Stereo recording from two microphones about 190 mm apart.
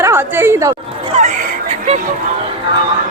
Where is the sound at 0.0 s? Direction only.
10° right (ahead or behind).